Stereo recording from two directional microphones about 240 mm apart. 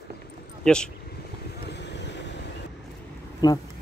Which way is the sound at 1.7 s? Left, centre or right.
Left.